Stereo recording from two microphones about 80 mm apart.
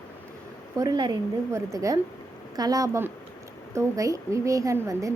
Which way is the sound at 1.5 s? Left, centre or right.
Right.